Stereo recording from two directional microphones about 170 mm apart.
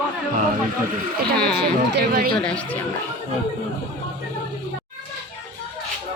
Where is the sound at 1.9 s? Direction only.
60° right (ahead or behind).